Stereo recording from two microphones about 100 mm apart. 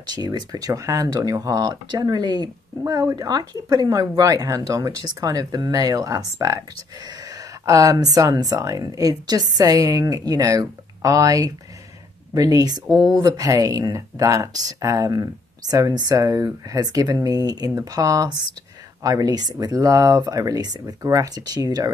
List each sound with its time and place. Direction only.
0.0 s speech: 45° right (ahead or behind)
7.6 s speech: 35° right (ahead or behind)
12.8 s speech: 5° left (ahead or behind)
13.2 s speech: 35° right (ahead or behind)